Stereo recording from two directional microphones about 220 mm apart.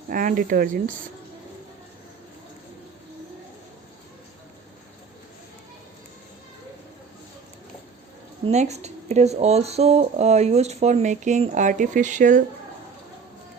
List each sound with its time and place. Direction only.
0.1 s speech: 35° right (ahead or behind)
8.4 s speech: 30° right (ahead or behind)